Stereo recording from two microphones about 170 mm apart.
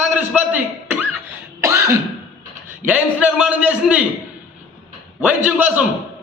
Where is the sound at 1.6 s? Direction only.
15° right (ahead or behind).